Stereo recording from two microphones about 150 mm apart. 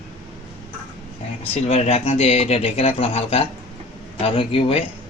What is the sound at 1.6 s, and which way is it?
A man's voice, 45° left (ahead or behind).